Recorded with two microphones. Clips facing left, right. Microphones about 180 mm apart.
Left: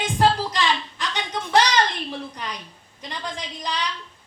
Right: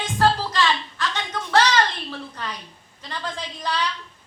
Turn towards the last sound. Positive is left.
turn(degrees=15)  # may be behind; listen again after turning